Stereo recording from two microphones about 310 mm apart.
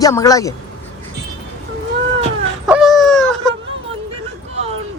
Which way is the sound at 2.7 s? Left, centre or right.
Centre.